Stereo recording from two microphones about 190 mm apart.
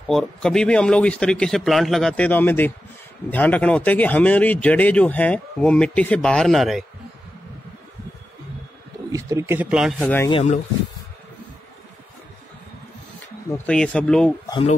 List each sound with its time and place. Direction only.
0.1 s a man's voice: centre (ahead or behind)
9.1 s speech: 15° right (ahead or behind)
10.0 s speech: 10° left (ahead or behind)
10.3 s speech: 35° left (ahead or behind)
13.7 s a man's voice: 5° left (ahead or behind)
14.5 s speech: 30° left (ahead or behind)